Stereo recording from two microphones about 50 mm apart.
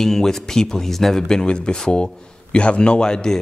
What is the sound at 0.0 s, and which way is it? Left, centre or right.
A man's voice, centre.